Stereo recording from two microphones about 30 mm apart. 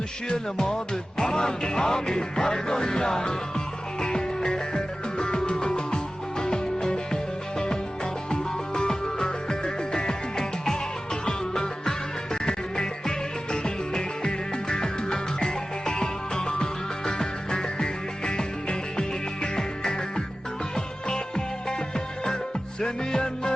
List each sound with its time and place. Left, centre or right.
0.5 s music: centre
8.3 s music: left